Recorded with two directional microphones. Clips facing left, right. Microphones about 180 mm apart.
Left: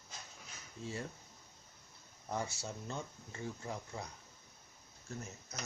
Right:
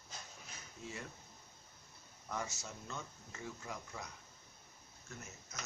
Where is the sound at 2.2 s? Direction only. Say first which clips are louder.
Left 3 dB; 30° left (ahead or behind).